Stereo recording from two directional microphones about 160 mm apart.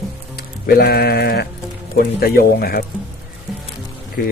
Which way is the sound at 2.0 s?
70° left (ahead or behind).